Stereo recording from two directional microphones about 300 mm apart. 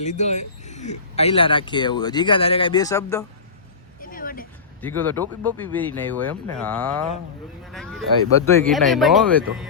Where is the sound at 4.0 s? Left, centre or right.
Left.